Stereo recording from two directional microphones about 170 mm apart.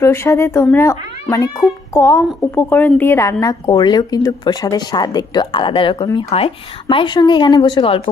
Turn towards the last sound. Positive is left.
turn(degrees=30)  # may be behind; listen again after turning